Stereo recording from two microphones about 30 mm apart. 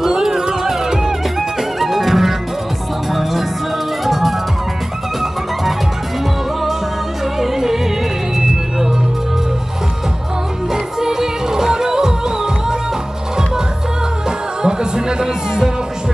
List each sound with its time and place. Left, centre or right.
0.1 s music: centre
1.6 s music: centre
7.3 s music: centre
10.7 s music: centre
14.6 s music: right